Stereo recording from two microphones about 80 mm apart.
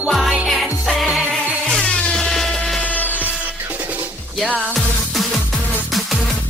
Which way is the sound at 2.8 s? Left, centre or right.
Left.